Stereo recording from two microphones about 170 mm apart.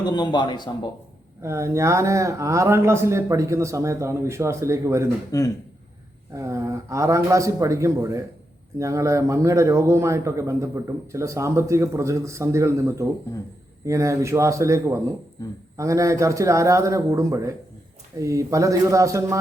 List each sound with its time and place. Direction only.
0.0 s speech: 25° left (ahead or behind)
1.4 s speech: 15° right (ahead or behind)
5.3 s speech: 20° left (ahead or behind)
6.3 s a man's voice: 20° right (ahead or behind)